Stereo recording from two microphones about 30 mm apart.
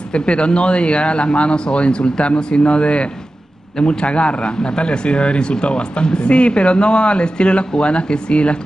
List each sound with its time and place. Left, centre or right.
0.1 s speech: left